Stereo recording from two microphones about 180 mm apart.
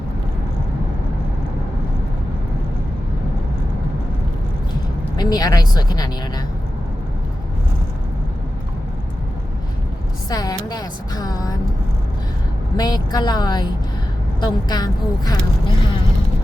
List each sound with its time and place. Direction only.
5.1 s speech: 20° left (ahead or behind)
10.2 s a woman's voice: 20° left (ahead or behind)
12.7 s speech: 20° left (ahead or behind)
14.7 s speech: 20° left (ahead or behind)